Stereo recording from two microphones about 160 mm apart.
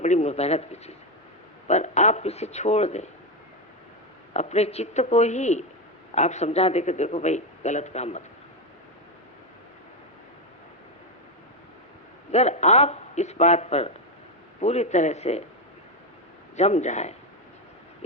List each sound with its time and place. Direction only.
0.0 s speech: 45° left (ahead or behind)
4.4 s speech: 45° left (ahead or behind)
12.3 s speech: 45° left (ahead or behind)
16.6 s speech: 45° left (ahead or behind)